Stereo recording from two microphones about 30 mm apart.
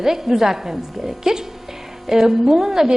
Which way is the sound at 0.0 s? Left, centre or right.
Centre.